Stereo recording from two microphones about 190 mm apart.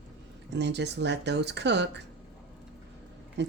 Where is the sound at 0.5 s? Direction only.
65° right (ahead or behind).